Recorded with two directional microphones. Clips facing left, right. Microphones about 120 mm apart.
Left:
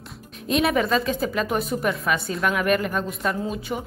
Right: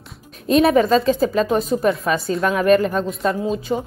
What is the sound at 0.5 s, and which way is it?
Speech, 35° right (ahead or behind).